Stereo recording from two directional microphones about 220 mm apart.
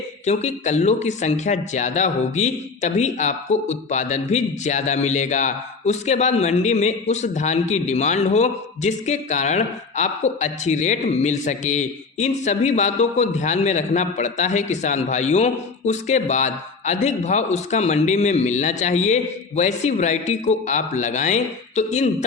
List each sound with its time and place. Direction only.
0.3 s speech: 30° left (ahead or behind)